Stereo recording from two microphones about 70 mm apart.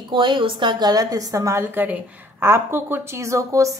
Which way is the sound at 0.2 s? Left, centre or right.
Right.